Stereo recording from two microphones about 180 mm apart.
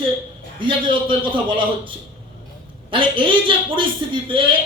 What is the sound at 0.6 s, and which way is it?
Speech, 25° right (ahead or behind).